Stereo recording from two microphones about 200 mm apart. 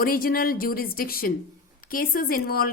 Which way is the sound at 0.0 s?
45° left (ahead or behind).